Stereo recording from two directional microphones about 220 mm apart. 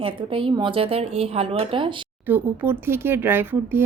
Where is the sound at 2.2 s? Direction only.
10° right (ahead or behind).